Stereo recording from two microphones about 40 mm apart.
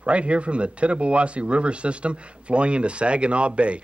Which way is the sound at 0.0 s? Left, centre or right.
Right.